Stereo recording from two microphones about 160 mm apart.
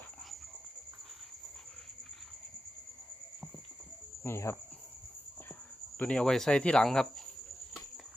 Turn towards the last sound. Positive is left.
turn(degrees=5)  # may be behind; listen again after turning